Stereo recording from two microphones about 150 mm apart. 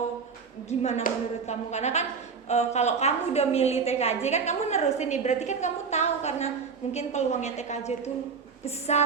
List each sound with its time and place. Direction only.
0.7 s a woman's voice: 50° left (ahead or behind)